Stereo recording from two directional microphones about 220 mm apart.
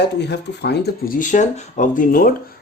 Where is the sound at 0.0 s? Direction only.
50° left (ahead or behind).